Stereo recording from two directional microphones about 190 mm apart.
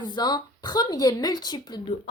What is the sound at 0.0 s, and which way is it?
Speech, 25° left (ahead or behind).